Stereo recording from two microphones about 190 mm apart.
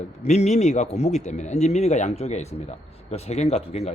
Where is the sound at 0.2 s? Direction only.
35° left (ahead or behind).